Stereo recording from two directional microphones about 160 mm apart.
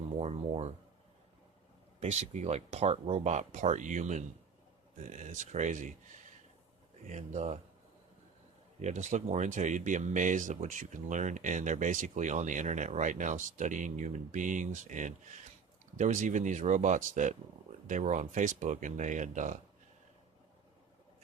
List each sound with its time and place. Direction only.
0.2 s speech: 40° right (ahead or behind)
2.0 s speech: 45° right (ahead or behind)
8.8 s speech: 50° right (ahead or behind)